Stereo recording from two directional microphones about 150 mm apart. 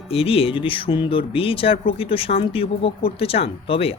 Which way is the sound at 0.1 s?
40° left (ahead or behind).